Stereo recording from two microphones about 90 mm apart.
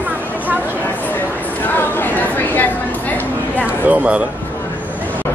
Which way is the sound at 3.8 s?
15° right (ahead or behind).